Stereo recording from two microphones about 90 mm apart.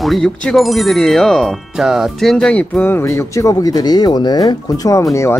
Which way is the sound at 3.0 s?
35° left (ahead or behind).